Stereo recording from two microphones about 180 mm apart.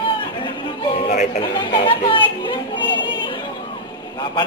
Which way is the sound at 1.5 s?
25° left (ahead or behind).